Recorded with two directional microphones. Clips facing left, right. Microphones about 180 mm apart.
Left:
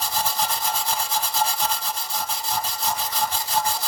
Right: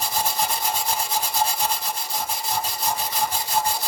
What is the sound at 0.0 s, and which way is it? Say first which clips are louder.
Rub: right 1 dB; 15° right (ahead or behind).